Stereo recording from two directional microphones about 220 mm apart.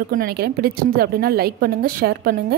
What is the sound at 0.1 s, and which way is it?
A woman's voice, 45° right (ahead or behind).